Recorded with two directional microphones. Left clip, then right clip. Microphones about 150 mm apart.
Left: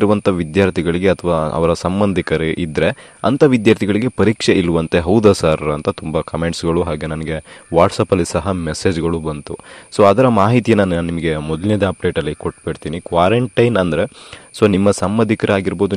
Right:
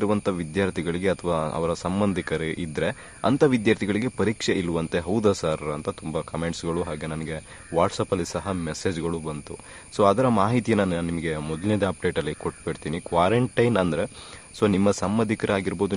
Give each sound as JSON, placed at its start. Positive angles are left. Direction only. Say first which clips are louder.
{"t": 0.0, "sound": "speech", "louder": "left 10 dB", "side_deg": 55}
{"t": 1.9, "sound": "speech", "louder": "left 8 dB", "side_deg": 35}
{"t": 2.1, "sound": "speech", "louder": "left 10 dB", "side_deg": 55}